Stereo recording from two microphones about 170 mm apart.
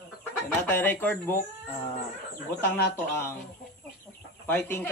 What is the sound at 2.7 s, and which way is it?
Speech, 15° left (ahead or behind).